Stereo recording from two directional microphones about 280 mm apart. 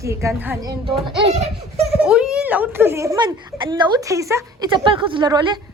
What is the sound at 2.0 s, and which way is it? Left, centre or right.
A woman's voice, centre.